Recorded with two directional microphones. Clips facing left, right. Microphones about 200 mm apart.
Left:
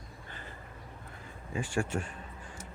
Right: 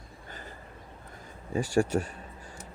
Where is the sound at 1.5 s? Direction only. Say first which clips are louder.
Right 7 dB; 40° right (ahead or behind).